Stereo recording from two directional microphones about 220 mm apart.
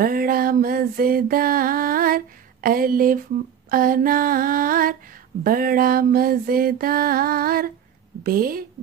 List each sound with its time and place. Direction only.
0.0 s music: 40° right (ahead or behind)
3.7 s a sound: 40° right (ahead or behind)
8.2 s a woman's voice: 40° right (ahead or behind)